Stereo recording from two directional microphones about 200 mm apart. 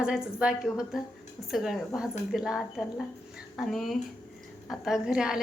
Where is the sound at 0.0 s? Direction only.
5° right (ahead or behind).